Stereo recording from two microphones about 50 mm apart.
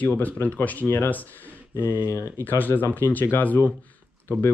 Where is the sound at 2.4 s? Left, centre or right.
Left.